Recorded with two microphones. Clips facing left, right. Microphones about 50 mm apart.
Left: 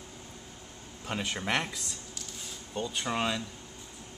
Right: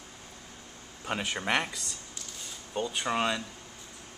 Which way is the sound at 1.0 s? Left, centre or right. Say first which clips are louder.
Right 2 dB; centre.